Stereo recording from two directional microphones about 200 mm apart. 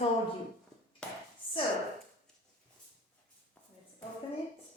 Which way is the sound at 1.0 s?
5° left (ahead or behind).